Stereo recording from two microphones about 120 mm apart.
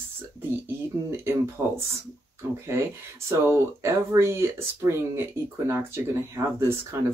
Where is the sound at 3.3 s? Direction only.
20° right (ahead or behind).